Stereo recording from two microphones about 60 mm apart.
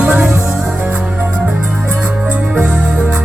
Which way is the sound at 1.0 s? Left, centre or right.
Right.